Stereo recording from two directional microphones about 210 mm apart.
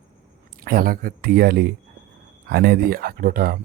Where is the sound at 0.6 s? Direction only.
45° right (ahead or behind).